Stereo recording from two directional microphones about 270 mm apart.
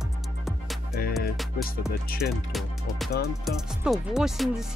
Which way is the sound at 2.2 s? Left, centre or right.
Left.